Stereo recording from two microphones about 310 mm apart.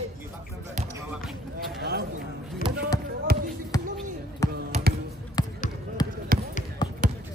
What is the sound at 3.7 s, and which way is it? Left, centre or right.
Basketball bounce, centre.